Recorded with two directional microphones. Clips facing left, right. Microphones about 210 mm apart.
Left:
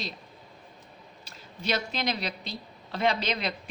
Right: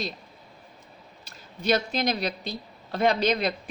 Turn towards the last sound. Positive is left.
turn(degrees=-45)  # may be behind; listen again after turning